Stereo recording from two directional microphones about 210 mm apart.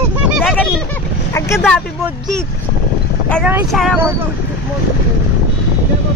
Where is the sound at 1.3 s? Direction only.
10° left (ahead or behind).